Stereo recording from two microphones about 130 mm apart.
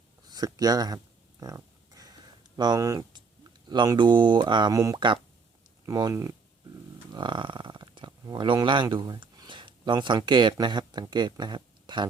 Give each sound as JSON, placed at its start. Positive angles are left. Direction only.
{"t": 0.3, "sound": "a sound", "side_deg": -30}
{"t": 2.6, "sound": "speech", "side_deg": -30}
{"t": 5.8, "sound": "speech", "side_deg": -25}
{"t": 7.1, "sound": "speech", "side_deg": -35}